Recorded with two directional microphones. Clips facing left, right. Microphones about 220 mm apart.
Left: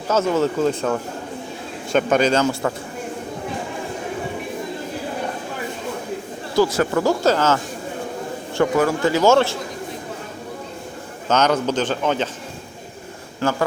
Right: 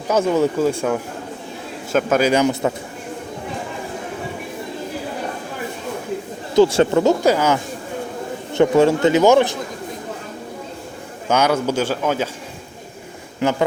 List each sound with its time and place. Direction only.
0.1 s a man's voice: 15° right (ahead or behind)
6.6 s speech: 25° right (ahead or behind)
8.5 s speech: 25° right (ahead or behind)
11.3 s a man's voice: 10° right (ahead or behind)
13.4 s speech: 20° right (ahead or behind)